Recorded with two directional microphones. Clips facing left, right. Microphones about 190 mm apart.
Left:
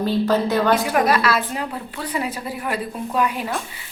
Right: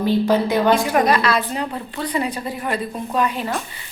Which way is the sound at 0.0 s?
15° right (ahead or behind).